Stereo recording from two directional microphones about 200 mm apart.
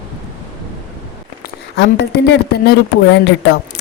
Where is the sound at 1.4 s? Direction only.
60° left (ahead or behind).